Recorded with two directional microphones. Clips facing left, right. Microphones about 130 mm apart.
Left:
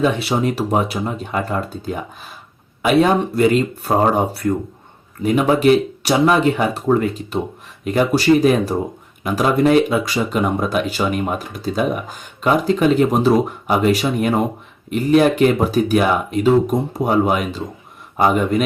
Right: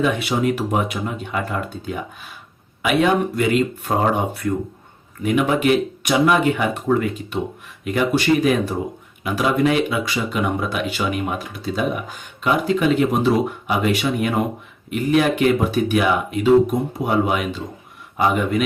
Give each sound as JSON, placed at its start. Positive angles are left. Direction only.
{"t": 0.0, "sound": "speech", "side_deg": 30}